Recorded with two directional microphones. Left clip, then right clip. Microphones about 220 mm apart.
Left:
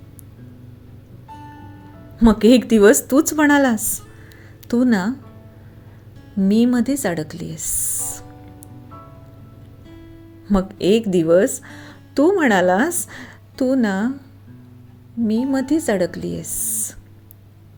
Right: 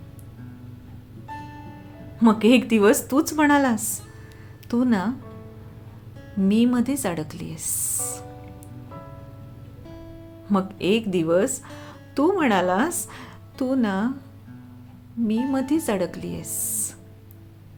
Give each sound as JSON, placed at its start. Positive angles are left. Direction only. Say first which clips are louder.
{"t": 2.1, "sound": "speech", "louder": "left 4 dB", "side_deg": 20}
{"t": 6.4, "sound": "speech", "louder": "left 4 dB", "side_deg": 20}
{"t": 10.5, "sound": "speech", "louder": "left 5 dB", "side_deg": 20}
{"t": 15.3, "sound": "speech", "louder": "left 4 dB", "side_deg": 20}